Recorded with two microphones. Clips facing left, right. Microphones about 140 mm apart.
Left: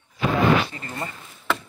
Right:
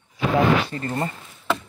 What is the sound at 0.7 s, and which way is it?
Speech, 40° right (ahead or behind).